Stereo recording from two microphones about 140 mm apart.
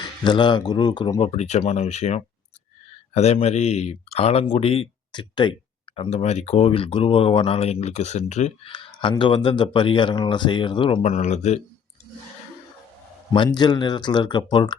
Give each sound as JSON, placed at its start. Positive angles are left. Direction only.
{"t": 0.3, "sound": "speech", "side_deg": 35}
{"t": 1.3, "sound": "speech", "side_deg": 50}
{"t": 6.0, "sound": "speech", "side_deg": 50}
{"t": 8.7, "sound": "speech", "side_deg": 35}
{"t": 11.0, "sound": "speech", "side_deg": 55}
{"t": 13.3, "sound": "speech", "side_deg": 35}